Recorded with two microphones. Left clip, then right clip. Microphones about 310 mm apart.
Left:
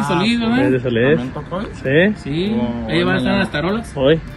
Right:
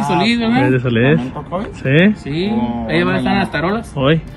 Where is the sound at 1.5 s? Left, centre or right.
Centre.